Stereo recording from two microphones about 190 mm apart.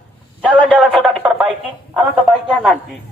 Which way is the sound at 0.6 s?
Centre (ahead or behind).